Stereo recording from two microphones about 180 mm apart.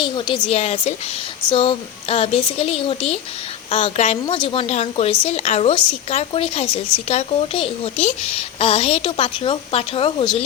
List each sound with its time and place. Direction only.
0.0 s a woman's voice: 25° left (ahead or behind)